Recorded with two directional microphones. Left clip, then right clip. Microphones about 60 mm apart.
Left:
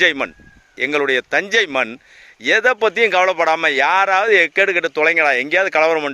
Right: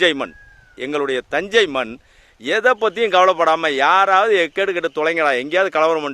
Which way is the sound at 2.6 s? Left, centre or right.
Centre.